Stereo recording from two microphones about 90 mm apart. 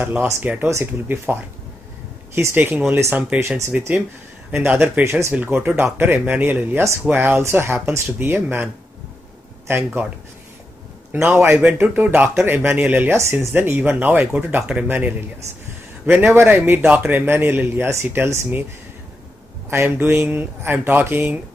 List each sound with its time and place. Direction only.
0.0 s speech: 20° right (ahead or behind)
0.7 s speech: 30° right (ahead or behind)
11.1 s speech: 20° right (ahead or behind)
19.7 s speech: 30° right (ahead or behind)